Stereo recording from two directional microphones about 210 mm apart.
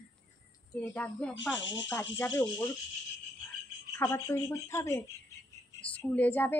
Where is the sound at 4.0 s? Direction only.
15° left (ahead or behind).